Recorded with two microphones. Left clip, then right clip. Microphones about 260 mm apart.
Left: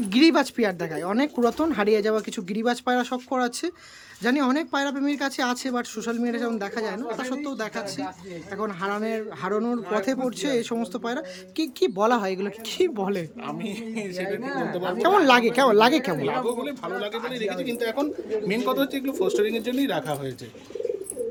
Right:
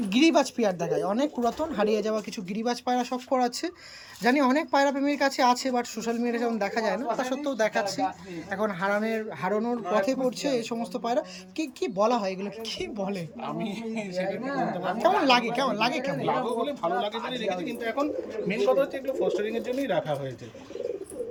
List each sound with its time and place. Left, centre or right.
0.1 s speech: centre